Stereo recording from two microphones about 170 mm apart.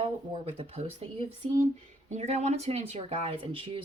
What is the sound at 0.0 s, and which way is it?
Speech, 35° right (ahead or behind).